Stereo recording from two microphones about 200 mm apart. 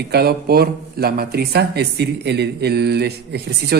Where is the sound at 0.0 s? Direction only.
55° right (ahead or behind).